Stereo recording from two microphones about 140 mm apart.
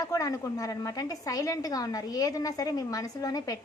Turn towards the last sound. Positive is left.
turn(degrees=25)  # may be behind; listen again after turning